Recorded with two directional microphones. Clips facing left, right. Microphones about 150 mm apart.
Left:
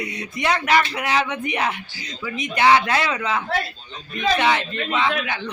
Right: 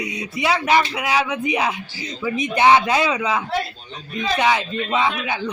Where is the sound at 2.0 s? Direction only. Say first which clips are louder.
Right 5 dB; 20° right (ahead or behind).